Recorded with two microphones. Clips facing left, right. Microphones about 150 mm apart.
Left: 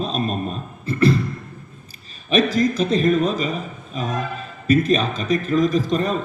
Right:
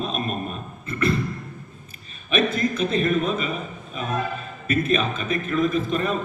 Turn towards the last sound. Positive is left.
turn(degrees=35)  # may be behind; listen again after turning